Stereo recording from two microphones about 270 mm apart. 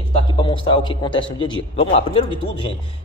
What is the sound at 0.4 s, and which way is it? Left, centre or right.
A man's voice, centre.